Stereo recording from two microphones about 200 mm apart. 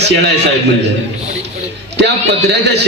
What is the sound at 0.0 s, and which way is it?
Speech, 55° right (ahead or behind).